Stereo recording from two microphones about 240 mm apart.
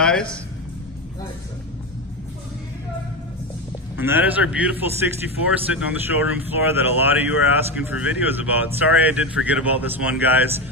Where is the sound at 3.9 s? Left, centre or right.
Centre.